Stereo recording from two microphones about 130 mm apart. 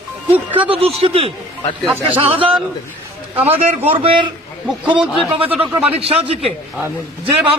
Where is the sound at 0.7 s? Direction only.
50° right (ahead or behind).